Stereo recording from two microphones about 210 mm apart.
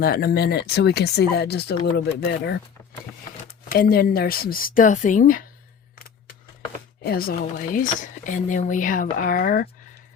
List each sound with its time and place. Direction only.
0.0 s speech: 45° left (ahead or behind)
3.7 s speech: 45° left (ahead or behind)
7.0 s speech: 45° left (ahead or behind)